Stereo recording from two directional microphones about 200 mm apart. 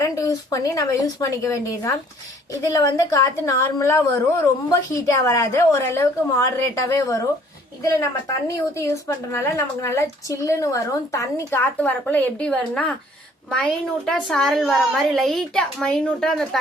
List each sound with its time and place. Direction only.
0.0 s a woman's voice: 15° left (ahead or behind)